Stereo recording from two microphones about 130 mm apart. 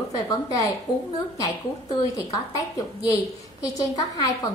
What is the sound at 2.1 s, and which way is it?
Speech, 25° left (ahead or behind).